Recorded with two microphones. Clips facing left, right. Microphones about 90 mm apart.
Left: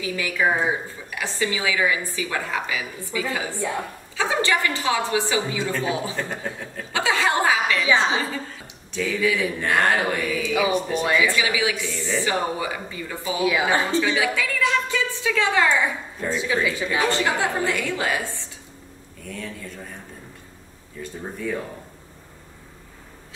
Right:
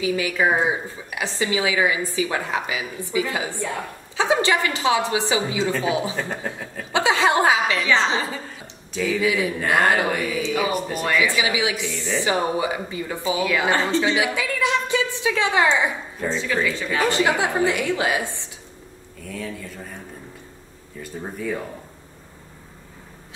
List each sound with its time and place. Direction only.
0.0 s a woman's voice: 20° right (ahead or behind)
6.9 s chuckle: 20° right (ahead or behind)
7.8 s a woman's voice: 10° left (ahead or behind)
8.9 s speech: 5° right (ahead or behind)
9.2 s speech: 15° right (ahead or behind)
10.7 s speech: 5° right (ahead or behind)
11.2 s a woman's voice: 15° right (ahead or behind)
13.4 s a woman's voice: 10° left (ahead or behind)
13.9 s a woman's voice: 20° right (ahead or behind)
16.3 s a woman's voice: 10° left (ahead or behind)
17.1 s a woman's voice: 15° right (ahead or behind)
19.2 s speech: centre (ahead or behind)
21.0 s speech: centre (ahead or behind)